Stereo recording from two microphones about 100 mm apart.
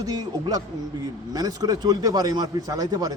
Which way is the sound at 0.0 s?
40° right (ahead or behind).